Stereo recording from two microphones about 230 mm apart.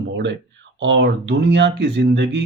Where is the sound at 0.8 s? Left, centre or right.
Right.